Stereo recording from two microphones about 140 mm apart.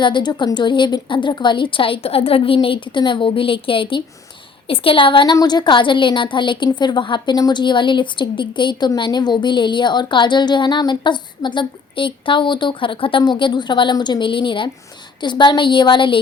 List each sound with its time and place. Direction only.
0.0 s a woman's voice: 35° left (ahead or behind)